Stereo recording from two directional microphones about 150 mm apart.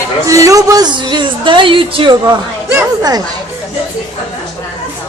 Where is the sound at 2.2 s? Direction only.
20° right (ahead or behind).